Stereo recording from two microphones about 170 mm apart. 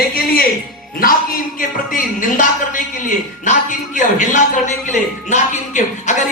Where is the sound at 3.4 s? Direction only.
45° left (ahead or behind).